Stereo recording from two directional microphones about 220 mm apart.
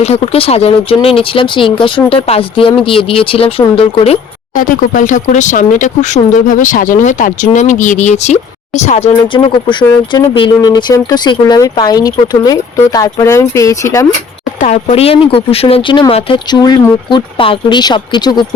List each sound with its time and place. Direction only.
0.0 s speech: 25° left (ahead or behind)
4.6 s speech: 40° left (ahead or behind); by 14.1 s 15° left (ahead or behind)
14.6 s speech: 30° left (ahead or behind)